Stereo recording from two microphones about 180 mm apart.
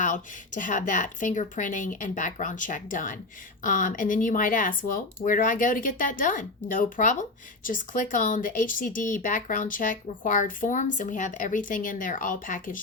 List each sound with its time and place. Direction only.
0.0 s speech: 45° left (ahead or behind)